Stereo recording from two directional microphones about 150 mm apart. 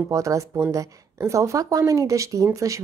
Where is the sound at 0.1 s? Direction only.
20° right (ahead or behind).